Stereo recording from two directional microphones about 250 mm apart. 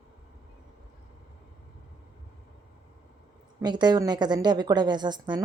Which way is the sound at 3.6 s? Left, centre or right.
Centre.